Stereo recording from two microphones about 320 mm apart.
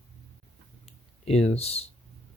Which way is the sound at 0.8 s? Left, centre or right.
Centre.